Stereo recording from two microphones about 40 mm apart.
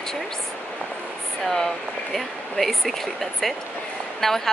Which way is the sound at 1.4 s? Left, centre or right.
Centre.